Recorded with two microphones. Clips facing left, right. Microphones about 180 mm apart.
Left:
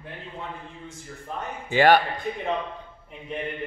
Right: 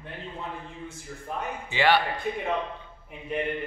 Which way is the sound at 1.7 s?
45° left (ahead or behind).